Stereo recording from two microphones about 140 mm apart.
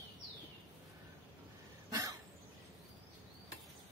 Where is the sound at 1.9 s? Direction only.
25° right (ahead or behind).